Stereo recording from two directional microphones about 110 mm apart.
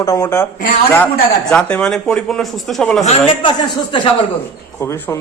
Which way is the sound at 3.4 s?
45° left (ahead or behind).